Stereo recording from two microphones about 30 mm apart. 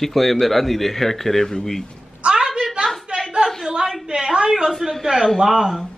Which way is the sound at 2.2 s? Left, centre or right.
Right.